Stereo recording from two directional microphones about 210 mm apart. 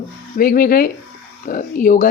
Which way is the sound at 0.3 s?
40° left (ahead or behind).